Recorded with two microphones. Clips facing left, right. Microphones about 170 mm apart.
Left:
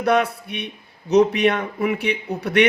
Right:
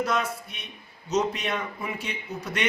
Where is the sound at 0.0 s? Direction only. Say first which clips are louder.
Left 8 dB; 60° left (ahead or behind).